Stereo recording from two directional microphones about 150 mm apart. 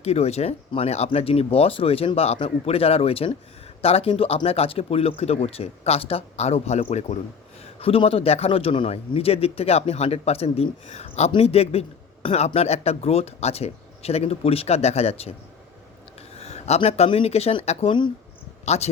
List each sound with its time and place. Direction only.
0.0 s a man's voice: 45° left (ahead or behind)
16.4 s speech: 45° left (ahead or behind)
18.6 s speech: 45° left (ahead or behind)